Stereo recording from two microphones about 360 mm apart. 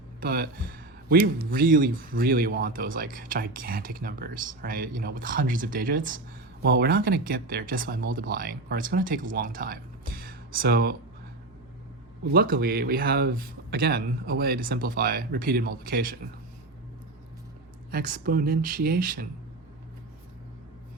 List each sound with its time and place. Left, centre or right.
0.2 s speech: right
12.2 s speech: right
17.9 s speech: right